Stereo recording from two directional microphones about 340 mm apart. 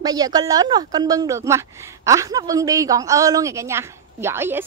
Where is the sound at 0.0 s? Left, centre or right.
Centre.